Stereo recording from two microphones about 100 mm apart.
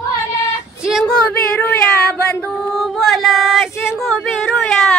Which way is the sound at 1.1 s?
15° left (ahead or behind).